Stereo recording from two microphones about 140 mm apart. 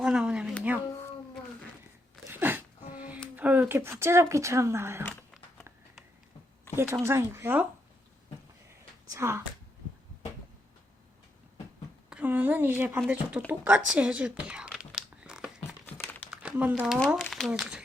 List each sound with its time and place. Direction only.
0.0 s a sound: 5° right (ahead or behind)
2.2 s a sound: 15° right (ahead or behind)
2.9 s music: 10° right (ahead or behind)
3.3 s speech: 10° right (ahead or behind)
7.0 s speech: 20° right (ahead or behind)
9.1 s a woman's voice: 15° right (ahead or behind)
12.1 s speech: 10° right (ahead or behind)
14.8 s a sound: 5° right (ahead or behind)
16.3 s speech: 10° right (ahead or behind)